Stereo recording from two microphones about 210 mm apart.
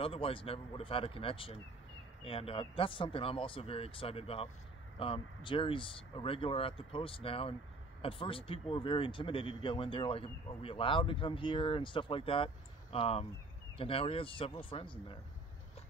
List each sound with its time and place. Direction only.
0.0 s speech: 25° left (ahead or behind)